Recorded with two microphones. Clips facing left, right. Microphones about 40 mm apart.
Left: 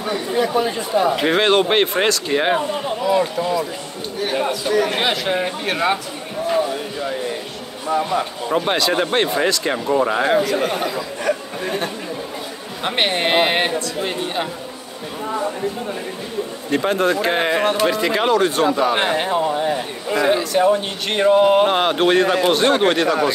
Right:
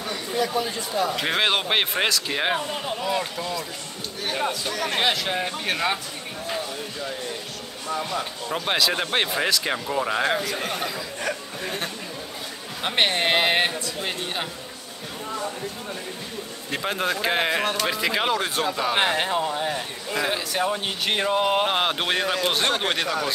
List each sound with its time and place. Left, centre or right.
0.0 s speech: left
1.2 s a man's voice: centre
7.9 s speech: left
8.6 s speech: centre
15.2 s speech: left
16.7 s speech: centre
22.2 s speech: centre